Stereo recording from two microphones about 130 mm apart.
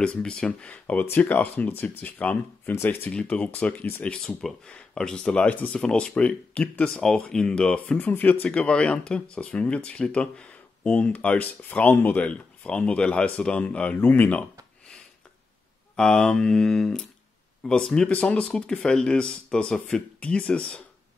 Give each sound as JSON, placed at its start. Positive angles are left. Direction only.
{"t": 0.0, "sound": "speech", "side_deg": 5}
{"t": 16.0, "sound": "speech", "side_deg": 5}